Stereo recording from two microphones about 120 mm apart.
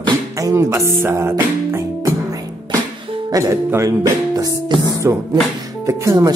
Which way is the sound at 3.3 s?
25° right (ahead or behind).